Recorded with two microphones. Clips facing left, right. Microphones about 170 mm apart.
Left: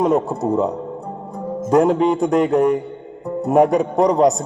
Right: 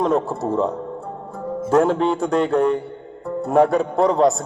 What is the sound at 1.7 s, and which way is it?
A man's voice, 15° left (ahead or behind).